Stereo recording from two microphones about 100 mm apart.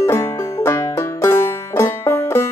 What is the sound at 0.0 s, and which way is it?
Music, 25° left (ahead or behind).